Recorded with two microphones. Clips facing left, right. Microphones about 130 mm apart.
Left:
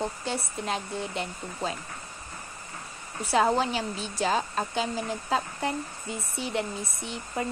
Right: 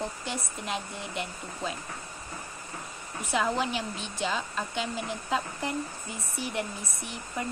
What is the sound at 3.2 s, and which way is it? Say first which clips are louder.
A woman's voice: left 4 dB; 35° left (ahead or behind).